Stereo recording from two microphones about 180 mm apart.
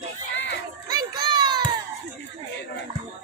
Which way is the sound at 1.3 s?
25° right (ahead or behind).